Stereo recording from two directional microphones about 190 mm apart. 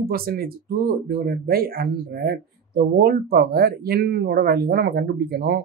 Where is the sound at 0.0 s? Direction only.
50° right (ahead or behind).